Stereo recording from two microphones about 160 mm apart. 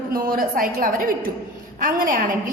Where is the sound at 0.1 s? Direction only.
60° right (ahead or behind).